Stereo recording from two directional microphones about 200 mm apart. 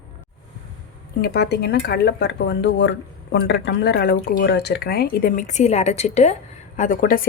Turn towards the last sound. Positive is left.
turn(degrees=45)  # may be behind; listen again after turning